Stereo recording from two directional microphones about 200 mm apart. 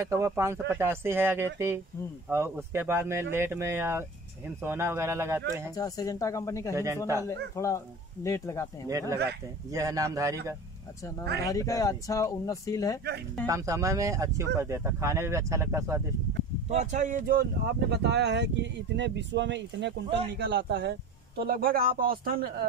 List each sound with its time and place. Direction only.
0.0 s speech: 15° right (ahead or behind)
5.8 s speech: 20° left (ahead or behind)
6.7 s speech: 15° right (ahead or behind)
7.5 s speech: 15° left (ahead or behind)
9.7 s speech: 15° right (ahead or behind)
11.4 s speech: 15° left (ahead or behind)
13.5 s speech: 15° right (ahead or behind)
16.7 s a man's voice: 35° right (ahead or behind)